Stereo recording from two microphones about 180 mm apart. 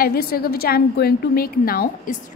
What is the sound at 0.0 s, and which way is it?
A woman's voice, 55° left (ahead or behind).